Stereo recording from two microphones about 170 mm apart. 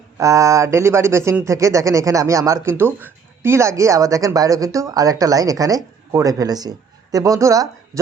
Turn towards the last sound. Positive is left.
turn(degrees=-20)  # may be behind; listen again after turning